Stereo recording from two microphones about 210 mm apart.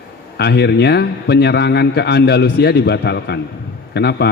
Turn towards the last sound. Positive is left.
turn(degrees=50)  # may be behind; listen again after turning